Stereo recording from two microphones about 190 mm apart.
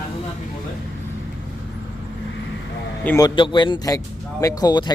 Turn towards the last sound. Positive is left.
turn(degrees=20)  # may be behind; listen again after turning